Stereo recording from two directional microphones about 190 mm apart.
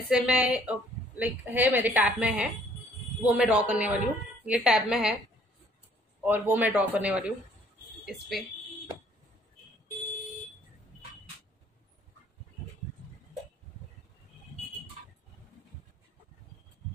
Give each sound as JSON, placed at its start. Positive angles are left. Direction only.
{"t": 0.1, "sound": "a woman's voice", "side_deg": -5}
{"t": 6.2, "sound": "a woman's voice", "side_deg": -10}